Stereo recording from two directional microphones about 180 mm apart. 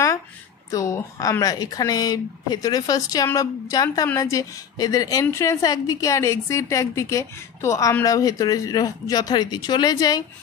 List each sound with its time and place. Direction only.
0.7 s a woman's voice: 15° left (ahead or behind)